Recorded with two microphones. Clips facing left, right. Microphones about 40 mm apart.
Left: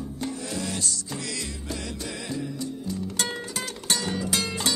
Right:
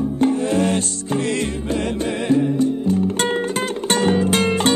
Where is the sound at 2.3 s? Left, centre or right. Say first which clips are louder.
Right 17 dB; right.